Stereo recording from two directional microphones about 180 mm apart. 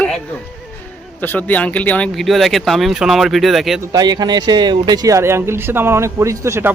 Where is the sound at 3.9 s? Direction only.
20° right (ahead or behind).